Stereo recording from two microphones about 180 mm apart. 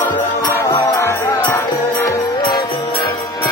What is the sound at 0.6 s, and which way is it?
Music, 20° left (ahead or behind).